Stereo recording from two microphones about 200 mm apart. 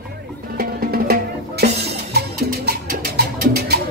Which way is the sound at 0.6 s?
50° right (ahead or behind).